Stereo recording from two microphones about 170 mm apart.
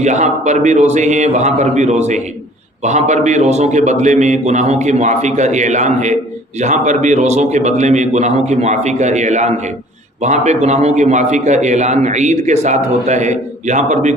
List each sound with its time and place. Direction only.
0.0 s a man's voice: 45° right (ahead or behind)